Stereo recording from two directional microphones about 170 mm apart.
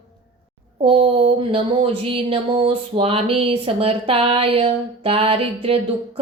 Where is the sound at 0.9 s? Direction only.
35° right (ahead or behind).